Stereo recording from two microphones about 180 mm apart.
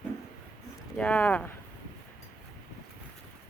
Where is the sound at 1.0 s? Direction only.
5° left (ahead or behind).